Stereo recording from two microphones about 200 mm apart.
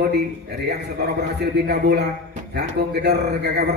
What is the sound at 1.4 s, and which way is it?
Speech, 55° right (ahead or behind).